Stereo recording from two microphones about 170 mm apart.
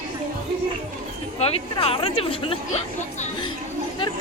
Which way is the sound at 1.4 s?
35° left (ahead or behind).